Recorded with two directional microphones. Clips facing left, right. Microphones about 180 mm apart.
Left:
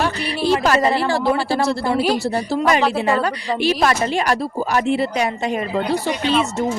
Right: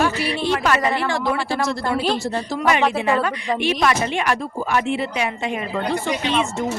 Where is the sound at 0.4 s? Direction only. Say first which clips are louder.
Left 5 dB; 35° left (ahead or behind).